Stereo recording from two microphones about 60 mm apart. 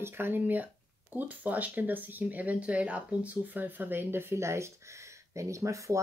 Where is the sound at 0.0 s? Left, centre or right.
Right.